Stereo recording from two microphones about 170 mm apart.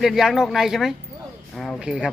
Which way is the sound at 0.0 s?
Centre (ahead or behind).